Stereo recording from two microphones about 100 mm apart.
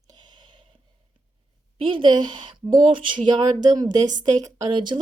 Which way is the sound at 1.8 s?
55° right (ahead or behind).